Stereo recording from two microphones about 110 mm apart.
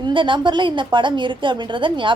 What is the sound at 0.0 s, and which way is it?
A woman's voice, 45° right (ahead or behind).